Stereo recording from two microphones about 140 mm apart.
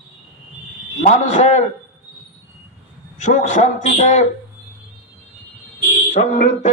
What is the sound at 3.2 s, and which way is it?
Speech, 55° left (ahead or behind).